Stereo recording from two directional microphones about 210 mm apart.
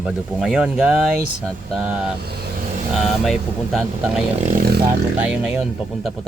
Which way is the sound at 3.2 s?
Centre (ahead or behind).